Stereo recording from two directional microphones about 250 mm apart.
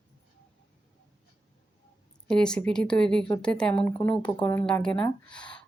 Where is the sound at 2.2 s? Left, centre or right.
Centre.